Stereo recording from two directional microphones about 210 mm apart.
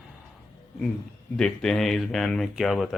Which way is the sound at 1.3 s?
5° left (ahead or behind).